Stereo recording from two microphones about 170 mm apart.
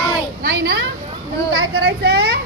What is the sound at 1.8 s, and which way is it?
Speech, 75° right (ahead or behind).